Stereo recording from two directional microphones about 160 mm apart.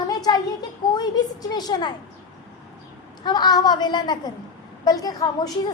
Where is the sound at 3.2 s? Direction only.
25° left (ahead or behind).